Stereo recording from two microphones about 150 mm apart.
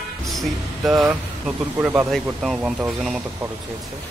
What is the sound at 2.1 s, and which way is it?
Speech, centre (ahead or behind).